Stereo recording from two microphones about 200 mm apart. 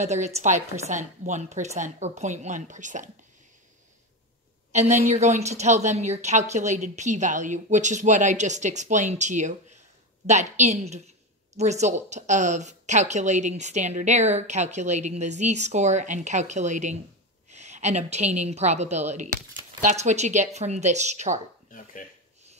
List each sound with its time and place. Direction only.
0.0 s speech: 35° right (ahead or behind)
4.7 s a woman's voice: 35° right (ahead or behind)